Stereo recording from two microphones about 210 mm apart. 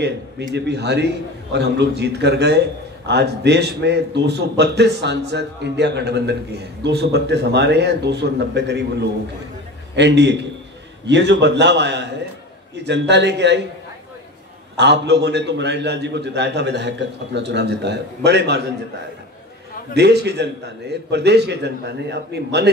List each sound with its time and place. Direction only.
0.6 s a man's voice: 55° right (ahead or behind)
14.8 s a man's voice: 55° right (ahead or behind)
19.9 s a man's voice: 55° right (ahead or behind)